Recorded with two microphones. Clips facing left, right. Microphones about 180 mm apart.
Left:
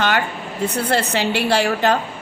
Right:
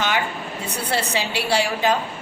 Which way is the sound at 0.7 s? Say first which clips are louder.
Left 3 dB; 55° left (ahead or behind).